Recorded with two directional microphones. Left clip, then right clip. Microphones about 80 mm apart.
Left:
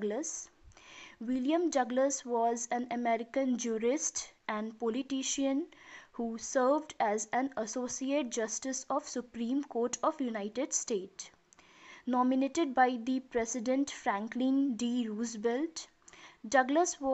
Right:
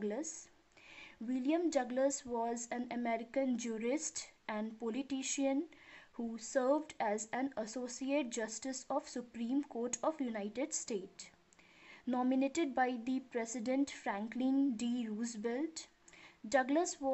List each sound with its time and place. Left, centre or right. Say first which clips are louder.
0.0 s speech: left 5 dB; left
12.1 s a woman's voice: left 5 dB; centre